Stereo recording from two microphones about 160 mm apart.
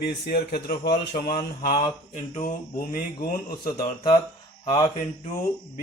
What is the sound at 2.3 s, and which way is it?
Speech, 60° left (ahead or behind).